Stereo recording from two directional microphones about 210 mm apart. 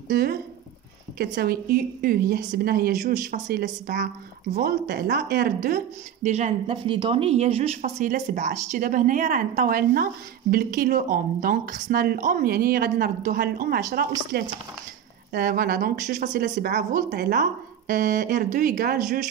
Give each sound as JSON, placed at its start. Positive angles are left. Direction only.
{"t": 0.1, "sound": "speech", "side_deg": -45}
{"t": 6.2, "sound": "speech", "side_deg": -35}